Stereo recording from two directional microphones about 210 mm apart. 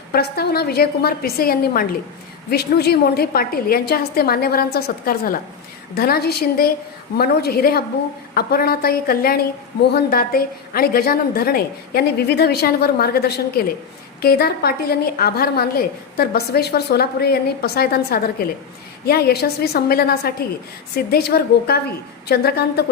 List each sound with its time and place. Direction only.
0.1 s a woman's voice: 50° left (ahead or behind)